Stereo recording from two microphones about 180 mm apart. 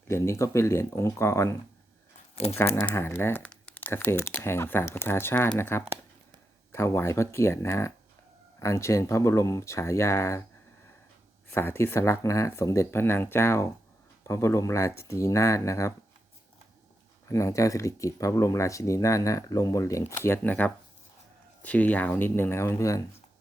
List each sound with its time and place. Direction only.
0.1 s speech: 15° left (ahead or behind)
2.3 s speech: 35° left (ahead or behind)
2.6 s speech: 10° left (ahead or behind)
11.5 s speech: 15° left (ahead or behind)
17.2 s speech: 15° left (ahead or behind)